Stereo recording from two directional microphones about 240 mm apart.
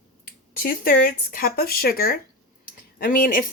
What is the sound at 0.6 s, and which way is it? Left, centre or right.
Speech, left.